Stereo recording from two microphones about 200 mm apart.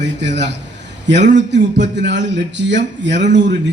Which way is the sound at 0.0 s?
60° right (ahead or behind).